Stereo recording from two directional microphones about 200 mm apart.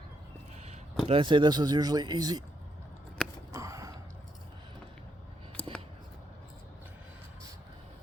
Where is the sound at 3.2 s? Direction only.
5° left (ahead or behind).